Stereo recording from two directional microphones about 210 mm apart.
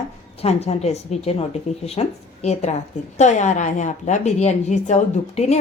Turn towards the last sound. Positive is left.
turn(degrees=30)  # may be behind; listen again after turning